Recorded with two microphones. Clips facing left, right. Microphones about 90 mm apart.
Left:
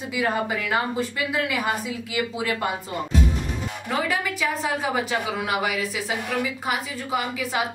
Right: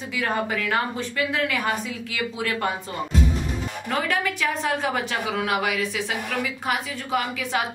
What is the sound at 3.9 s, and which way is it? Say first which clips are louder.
A woman's voice: even; 5° left (ahead or behind).